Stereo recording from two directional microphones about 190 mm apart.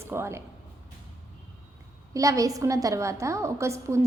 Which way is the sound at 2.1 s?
15° right (ahead or behind).